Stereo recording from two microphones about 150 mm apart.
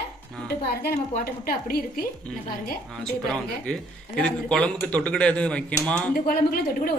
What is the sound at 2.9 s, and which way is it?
Speech, 5° left (ahead or behind).